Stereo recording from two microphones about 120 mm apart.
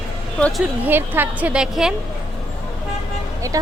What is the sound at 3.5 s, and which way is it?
Speech, 30° right (ahead or behind).